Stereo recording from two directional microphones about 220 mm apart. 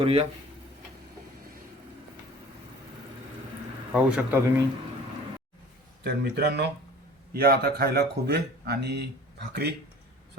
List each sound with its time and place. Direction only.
0.0 s speech: 25° right (ahead or behind)
3.9 s a man's voice: 10° right (ahead or behind)
6.0 s speech: 45° right (ahead or behind)